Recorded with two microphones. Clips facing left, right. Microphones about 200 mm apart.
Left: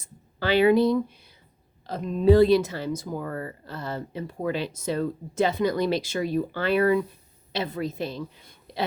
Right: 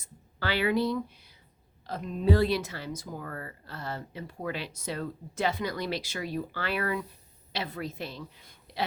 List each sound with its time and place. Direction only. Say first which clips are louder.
0.3 s speech: left 8 dB; 20° left (ahead or behind)